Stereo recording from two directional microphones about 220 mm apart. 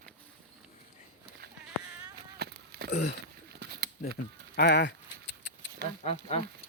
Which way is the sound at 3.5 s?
50° right (ahead or behind).